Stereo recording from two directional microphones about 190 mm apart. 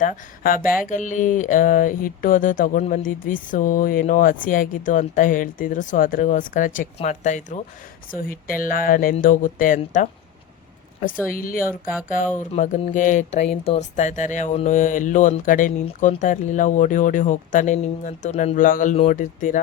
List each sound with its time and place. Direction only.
0.0 s speech: 45° left (ahead or behind)
11.3 s speech: 45° left (ahead or behind)